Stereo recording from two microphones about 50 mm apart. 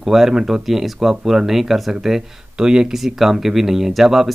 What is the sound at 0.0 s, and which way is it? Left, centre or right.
Speech, centre.